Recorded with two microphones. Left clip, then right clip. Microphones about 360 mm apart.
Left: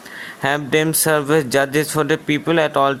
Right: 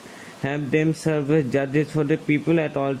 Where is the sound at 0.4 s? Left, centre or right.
Left.